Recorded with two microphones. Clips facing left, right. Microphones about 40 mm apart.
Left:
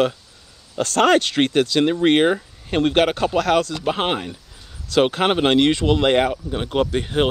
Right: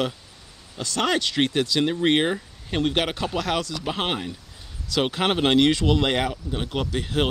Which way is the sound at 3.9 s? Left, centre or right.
Centre.